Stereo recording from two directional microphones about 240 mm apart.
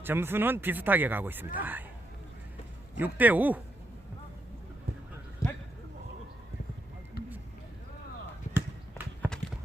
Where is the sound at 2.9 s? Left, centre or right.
Centre.